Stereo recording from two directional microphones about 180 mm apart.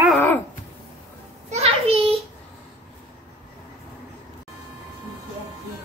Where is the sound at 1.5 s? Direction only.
35° right (ahead or behind).